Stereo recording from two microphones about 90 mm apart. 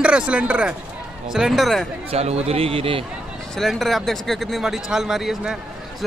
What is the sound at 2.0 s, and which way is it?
A man's voice, 90° right.